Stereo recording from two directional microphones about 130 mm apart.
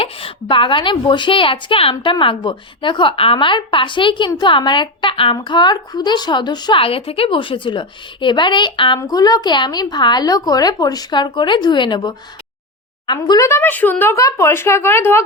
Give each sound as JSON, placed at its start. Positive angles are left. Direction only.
{"t": 0.0, "sound": "a woman's voice", "side_deg": 45}